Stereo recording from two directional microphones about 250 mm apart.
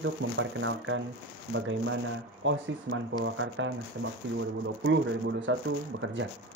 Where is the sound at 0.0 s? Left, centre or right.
Right.